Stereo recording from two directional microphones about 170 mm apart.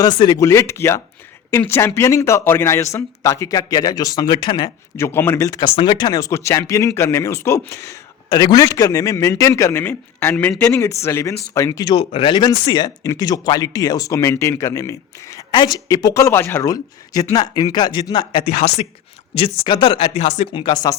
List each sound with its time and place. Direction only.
0.0 s speech: 25° left (ahead or behind)
4.9 s speech: 15° left (ahead or behind)